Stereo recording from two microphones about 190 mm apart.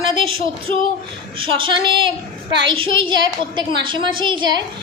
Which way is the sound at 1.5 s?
25° right (ahead or behind).